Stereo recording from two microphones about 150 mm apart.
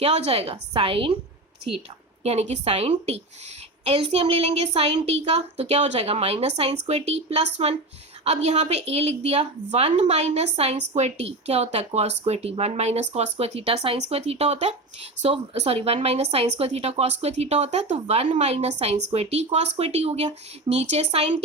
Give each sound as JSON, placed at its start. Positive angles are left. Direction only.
{"t": 0.0, "sound": "a woman's voice", "side_deg": -45}
{"t": 2.2, "sound": "speech", "side_deg": -45}